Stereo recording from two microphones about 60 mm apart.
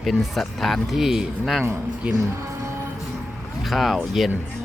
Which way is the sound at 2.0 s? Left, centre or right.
Centre.